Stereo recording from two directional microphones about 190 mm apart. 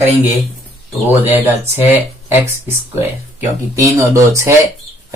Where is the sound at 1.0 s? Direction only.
10° right (ahead or behind).